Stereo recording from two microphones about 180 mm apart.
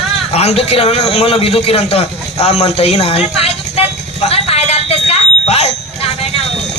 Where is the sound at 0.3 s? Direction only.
35° left (ahead or behind).